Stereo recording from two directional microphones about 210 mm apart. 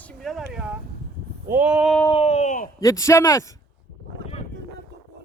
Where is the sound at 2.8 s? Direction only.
15° left (ahead or behind).